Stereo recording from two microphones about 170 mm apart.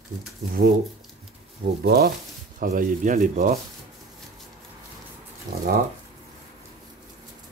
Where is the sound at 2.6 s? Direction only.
50° right (ahead or behind).